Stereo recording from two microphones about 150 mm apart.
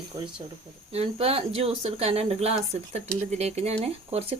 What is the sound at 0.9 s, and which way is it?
Speech, 40° right (ahead or behind).